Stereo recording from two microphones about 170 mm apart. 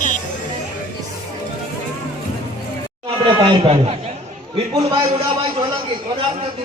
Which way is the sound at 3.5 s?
35° right (ahead or behind).